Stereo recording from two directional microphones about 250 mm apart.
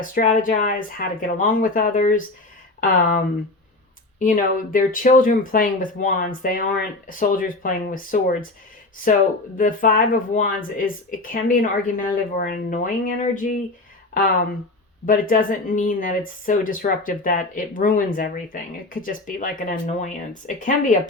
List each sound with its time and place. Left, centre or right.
0.0 s speech: left
9.6 s speech: left
15.0 s speech: left